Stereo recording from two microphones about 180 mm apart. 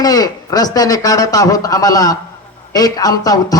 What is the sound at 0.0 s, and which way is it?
A man's voice, 20° left (ahead or behind).